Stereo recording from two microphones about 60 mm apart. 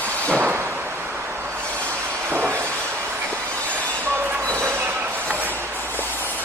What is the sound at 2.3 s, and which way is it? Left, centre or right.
Train, right.